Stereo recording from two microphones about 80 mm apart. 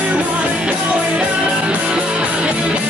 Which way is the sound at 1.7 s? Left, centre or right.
Centre.